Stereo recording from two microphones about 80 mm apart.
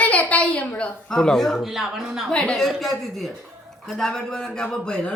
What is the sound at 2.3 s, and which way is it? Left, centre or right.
A woman's voice, centre.